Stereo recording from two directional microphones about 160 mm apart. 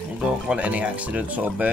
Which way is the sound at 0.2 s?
5° right (ahead or behind).